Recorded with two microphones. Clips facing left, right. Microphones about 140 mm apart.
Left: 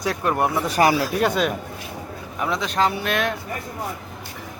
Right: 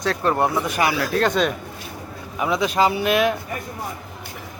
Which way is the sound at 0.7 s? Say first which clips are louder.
Left 3 dB; 35° left (ahead or behind).